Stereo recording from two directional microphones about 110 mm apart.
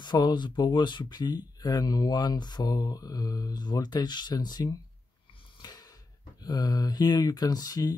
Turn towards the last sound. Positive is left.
turn(degrees=35)  # may be behind; listen again after turning